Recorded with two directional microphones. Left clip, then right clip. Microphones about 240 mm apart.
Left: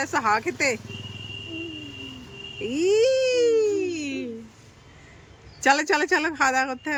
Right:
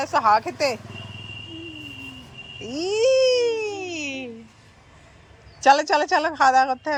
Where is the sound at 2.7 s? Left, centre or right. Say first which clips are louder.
Right 1 dB; centre.